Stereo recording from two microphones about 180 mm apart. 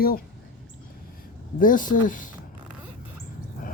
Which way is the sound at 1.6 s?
50° left (ahead or behind).